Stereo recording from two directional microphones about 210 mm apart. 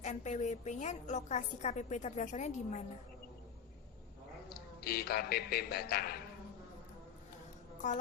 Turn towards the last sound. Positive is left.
turn(degrees=35)  # may be behind; listen again after turning